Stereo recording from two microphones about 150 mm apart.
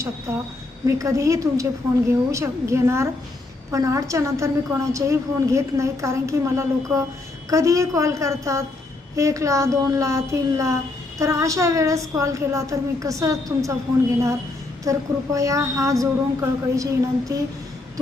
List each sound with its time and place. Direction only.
0.3 s a woman's voice: 15° right (ahead or behind)
14.8 s a woman's voice: 20° right (ahead or behind)